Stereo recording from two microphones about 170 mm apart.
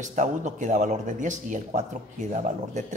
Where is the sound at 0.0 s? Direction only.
45° right (ahead or behind).